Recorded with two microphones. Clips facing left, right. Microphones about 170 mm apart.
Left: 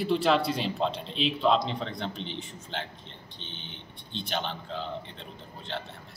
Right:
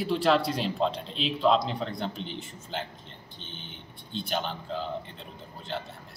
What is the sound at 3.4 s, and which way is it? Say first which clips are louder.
Speech: even; 45° right (ahead or behind).